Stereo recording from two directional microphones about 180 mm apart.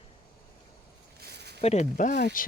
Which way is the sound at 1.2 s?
65° right (ahead or behind).